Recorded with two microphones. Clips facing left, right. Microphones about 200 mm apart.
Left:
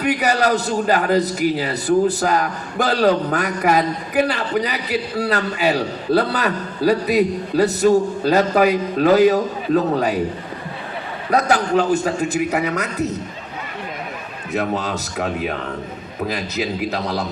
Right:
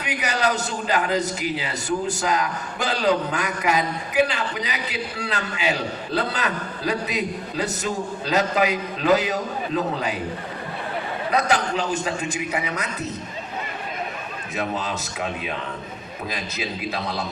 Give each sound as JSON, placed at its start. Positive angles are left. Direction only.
{"t": 0.0, "sound": "a man's voice", "side_deg": 45}
{"t": 6.1, "sound": "a man's voice", "side_deg": 35}
{"t": 11.3, "sound": "a man's voice", "side_deg": 40}
{"t": 12.5, "sound": "speech", "side_deg": 65}
{"t": 14.5, "sound": "speech", "side_deg": 60}
{"t": 16.9, "sound": "a man's voice", "side_deg": 70}